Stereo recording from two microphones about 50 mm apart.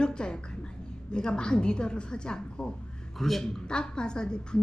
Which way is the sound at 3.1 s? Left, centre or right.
Centre.